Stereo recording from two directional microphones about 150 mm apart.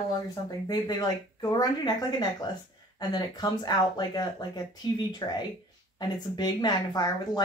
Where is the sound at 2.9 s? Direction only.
30° left (ahead or behind).